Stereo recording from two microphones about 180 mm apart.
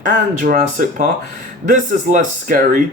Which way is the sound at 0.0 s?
45° right (ahead or behind).